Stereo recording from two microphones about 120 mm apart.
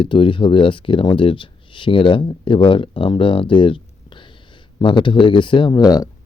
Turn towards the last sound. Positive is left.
turn(degrees=30)  # may be behind; listen again after turning